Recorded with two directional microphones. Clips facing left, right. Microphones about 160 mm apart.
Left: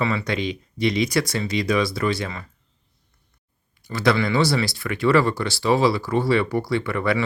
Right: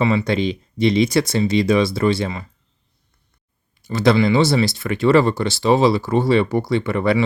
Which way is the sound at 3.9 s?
25° right (ahead or behind).